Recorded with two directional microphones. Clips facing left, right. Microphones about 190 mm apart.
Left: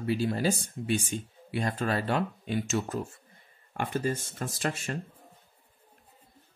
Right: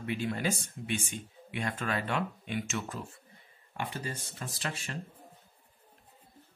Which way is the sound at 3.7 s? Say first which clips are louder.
Left 8 dB; 50° left (ahead or behind).